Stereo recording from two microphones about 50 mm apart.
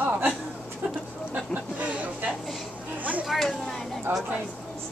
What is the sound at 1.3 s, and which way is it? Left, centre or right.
Speech, right.